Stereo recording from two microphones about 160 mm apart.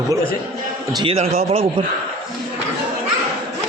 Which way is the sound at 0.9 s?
35° right (ahead or behind).